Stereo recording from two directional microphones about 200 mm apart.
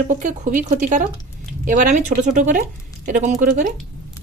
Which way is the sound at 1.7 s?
40° right (ahead or behind).